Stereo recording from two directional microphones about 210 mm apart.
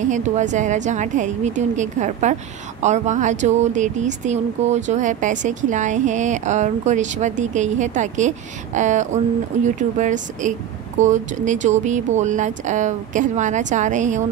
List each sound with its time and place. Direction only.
0.0 s speech: 35° right (ahead or behind)